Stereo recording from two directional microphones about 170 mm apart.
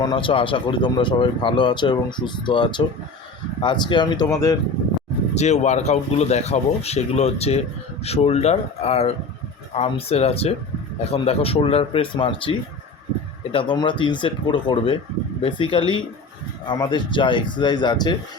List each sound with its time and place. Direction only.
0.0 s speech: 30° left (ahead or behind)
5.4 s speech: 40° left (ahead or behind); by 18.2 s 25° left (ahead or behind)